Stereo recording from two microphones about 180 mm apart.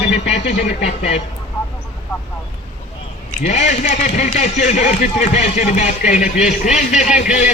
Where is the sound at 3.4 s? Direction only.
40° left (ahead or behind).